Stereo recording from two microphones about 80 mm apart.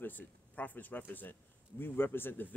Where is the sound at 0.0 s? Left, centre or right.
Left.